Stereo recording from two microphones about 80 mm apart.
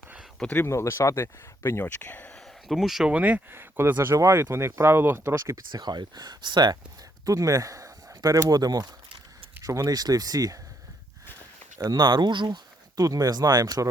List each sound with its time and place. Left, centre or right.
0.7 s speech: left
1.8 s speech: left
2.3 s a sound: centre
3.1 s speech: centre; by 5.6 s right
5.7 s speech: right
7.3 s speech: right
9.6 s speech: right
11.9 s speech: right
13.0 s speech: right